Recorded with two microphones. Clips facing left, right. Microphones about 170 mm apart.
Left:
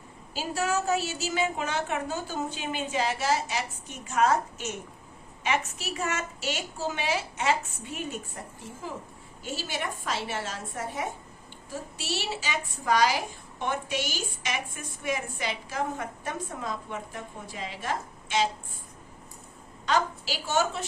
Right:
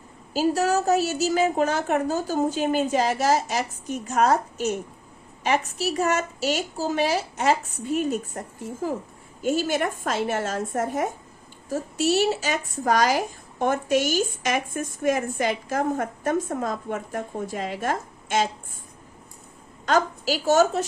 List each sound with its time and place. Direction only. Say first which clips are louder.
0.3 s a woman's voice: right 7 dB; 40° right (ahead or behind)
19.8 s a woman's voice: right 5 dB; 45° right (ahead or behind)